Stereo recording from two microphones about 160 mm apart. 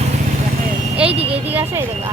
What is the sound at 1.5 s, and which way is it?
Speech, 10° right (ahead or behind).